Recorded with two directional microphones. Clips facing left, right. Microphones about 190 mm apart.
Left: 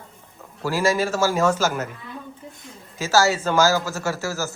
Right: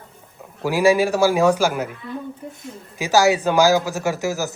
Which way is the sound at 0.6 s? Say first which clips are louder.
Right 5 dB; 15° right (ahead or behind).